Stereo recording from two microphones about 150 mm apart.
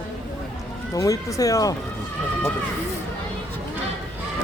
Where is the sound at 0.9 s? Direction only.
25° left (ahead or behind).